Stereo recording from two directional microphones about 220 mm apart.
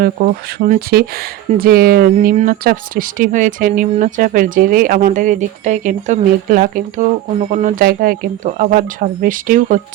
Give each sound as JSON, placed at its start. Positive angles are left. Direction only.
{"t": 0.0, "sound": "speech", "side_deg": -40}